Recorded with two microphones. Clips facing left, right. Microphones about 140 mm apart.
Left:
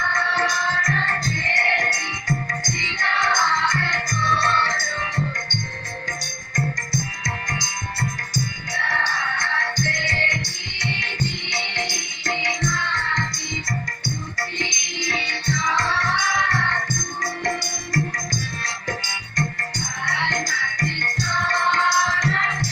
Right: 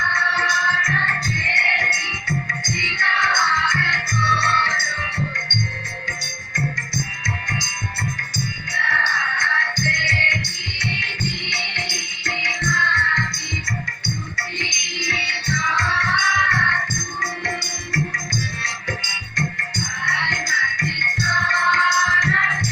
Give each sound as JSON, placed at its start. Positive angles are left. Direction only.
{"t": 0.1, "sound": "music", "side_deg": 40}
{"t": 8.7, "sound": "music", "side_deg": 40}
{"t": 15.0, "sound": "music", "side_deg": 40}
{"t": 18.6, "sound": "music", "side_deg": 40}